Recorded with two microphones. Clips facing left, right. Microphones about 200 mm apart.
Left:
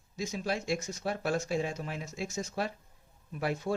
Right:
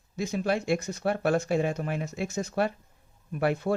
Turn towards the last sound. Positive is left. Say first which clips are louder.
# right 6 dB
turn(degrees=-60)  # may be behind; listen again after turning